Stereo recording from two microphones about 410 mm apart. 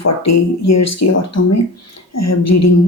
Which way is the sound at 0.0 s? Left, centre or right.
Left.